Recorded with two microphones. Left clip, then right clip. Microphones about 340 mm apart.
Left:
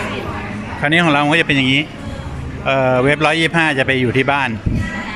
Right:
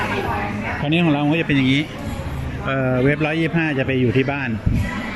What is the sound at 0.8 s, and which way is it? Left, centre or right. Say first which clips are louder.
Speech: left 7 dB; left.